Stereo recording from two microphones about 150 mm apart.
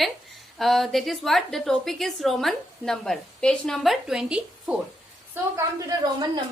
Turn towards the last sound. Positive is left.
turn(degrees=-20)  # may be behind; listen again after turning